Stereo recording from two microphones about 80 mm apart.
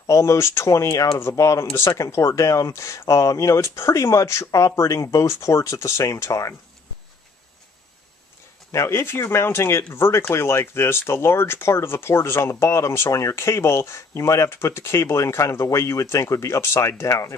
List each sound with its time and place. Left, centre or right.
0.0 s speech: left
8.7 s speech: left